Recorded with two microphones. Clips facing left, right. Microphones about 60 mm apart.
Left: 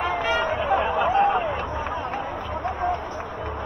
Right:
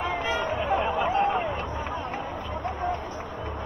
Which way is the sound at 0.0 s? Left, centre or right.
Left.